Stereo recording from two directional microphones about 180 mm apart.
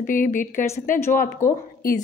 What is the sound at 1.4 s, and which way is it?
Speech, 15° left (ahead or behind).